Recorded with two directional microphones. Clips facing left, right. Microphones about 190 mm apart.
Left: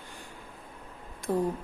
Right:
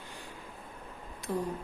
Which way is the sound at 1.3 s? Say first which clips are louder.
Left 5 dB; 50° left (ahead or behind).